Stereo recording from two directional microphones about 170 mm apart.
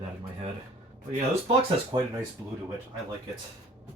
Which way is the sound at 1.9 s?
25° right (ahead or behind).